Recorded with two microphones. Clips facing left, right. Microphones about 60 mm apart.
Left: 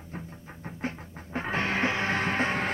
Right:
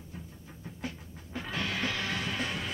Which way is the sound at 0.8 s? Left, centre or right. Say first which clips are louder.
Left 6 dB; left.